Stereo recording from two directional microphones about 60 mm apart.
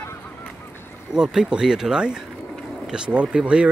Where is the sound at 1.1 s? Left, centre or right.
Centre.